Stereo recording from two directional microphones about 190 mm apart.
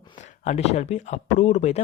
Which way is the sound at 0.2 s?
40° left (ahead or behind).